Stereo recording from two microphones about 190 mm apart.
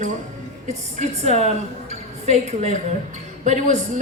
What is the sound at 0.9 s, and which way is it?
A woman's voice, 35° right (ahead or behind).